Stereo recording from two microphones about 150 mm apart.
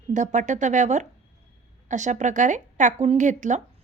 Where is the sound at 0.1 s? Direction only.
55° right (ahead or behind).